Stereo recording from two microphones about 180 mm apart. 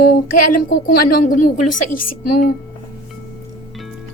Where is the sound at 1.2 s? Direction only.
45° left (ahead or behind).